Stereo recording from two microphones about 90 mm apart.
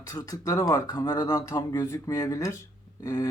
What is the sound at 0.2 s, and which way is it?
Speech, 40° left (ahead or behind).